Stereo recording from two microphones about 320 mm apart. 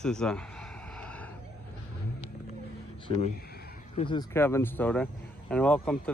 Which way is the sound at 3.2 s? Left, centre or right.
Left.